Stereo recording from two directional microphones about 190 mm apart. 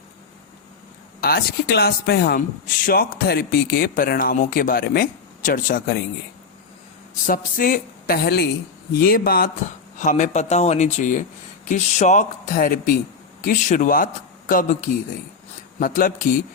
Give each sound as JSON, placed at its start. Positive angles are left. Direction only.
{"t": 1.2, "sound": "a man's voice", "side_deg": 55}
{"t": 7.3, "sound": "a man's voice", "side_deg": 50}
{"t": 10.0, "sound": "a man's voice", "side_deg": 40}